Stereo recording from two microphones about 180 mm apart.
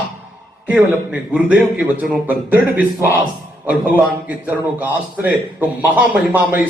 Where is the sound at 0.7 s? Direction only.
5° right (ahead or behind).